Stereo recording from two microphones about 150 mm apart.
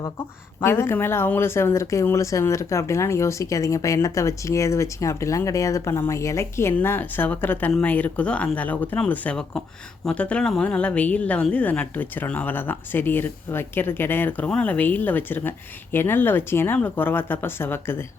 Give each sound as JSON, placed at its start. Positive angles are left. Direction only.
{"t": 0.6, "sound": "speech", "side_deg": 15}